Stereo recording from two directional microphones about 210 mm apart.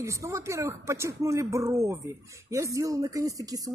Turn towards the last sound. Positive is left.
turn(degrees=-15)  # may be behind; listen again after turning